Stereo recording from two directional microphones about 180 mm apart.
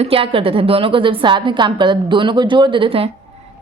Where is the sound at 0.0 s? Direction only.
30° right (ahead or behind).